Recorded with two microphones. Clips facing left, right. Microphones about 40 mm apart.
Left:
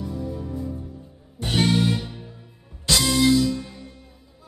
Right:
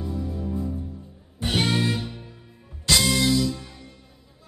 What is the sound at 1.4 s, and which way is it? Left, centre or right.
Music, centre.